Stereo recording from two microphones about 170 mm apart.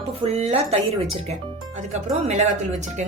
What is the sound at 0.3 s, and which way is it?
Speech, 40° right (ahead or behind).